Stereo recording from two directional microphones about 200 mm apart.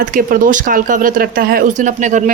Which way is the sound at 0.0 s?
45° right (ahead or behind).